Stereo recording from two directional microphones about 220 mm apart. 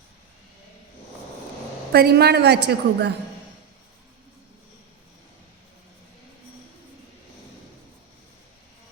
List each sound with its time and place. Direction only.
1.9 s a woman's voice: 45° right (ahead or behind)